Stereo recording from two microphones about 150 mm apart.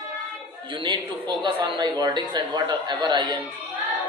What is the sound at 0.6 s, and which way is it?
A man's voice, 30° right (ahead or behind).